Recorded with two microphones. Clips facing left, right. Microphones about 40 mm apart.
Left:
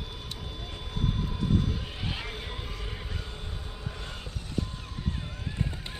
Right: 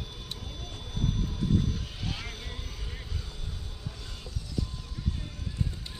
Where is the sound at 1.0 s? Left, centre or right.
Centre.